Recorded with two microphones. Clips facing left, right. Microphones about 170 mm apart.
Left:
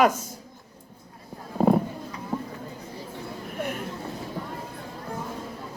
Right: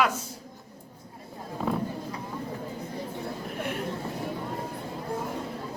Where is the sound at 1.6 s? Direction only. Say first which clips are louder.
Left 9 dB; 40° left (ahead or behind).